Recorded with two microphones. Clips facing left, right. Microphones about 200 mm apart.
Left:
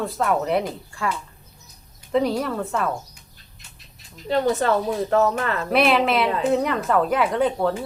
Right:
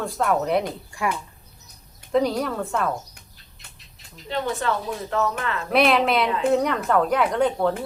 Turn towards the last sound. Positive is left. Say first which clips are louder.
# even
turn(degrees=0)  # may be behind; listen again after turning